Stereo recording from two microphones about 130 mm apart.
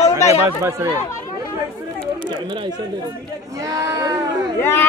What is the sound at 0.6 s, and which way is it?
Speech, 25° right (ahead or behind).